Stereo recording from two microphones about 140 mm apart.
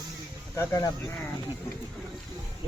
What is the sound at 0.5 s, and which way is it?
Speech, 20° left (ahead or behind).